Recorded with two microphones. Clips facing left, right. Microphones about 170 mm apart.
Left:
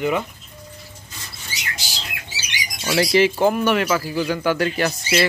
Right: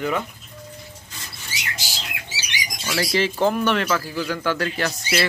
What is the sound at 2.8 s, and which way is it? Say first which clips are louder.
Speech: left 6 dB; 20° left (ahead or behind).